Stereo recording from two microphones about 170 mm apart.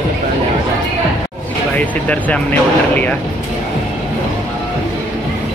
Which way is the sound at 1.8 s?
10° left (ahead or behind).